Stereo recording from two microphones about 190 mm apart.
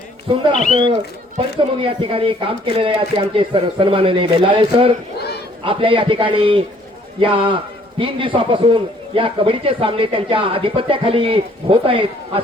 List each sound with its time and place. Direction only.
0.7 s a man's voice: 25° right (ahead or behind)